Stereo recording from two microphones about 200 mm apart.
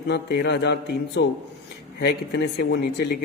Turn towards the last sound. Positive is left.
turn(degrees=55)  # may be behind; listen again after turning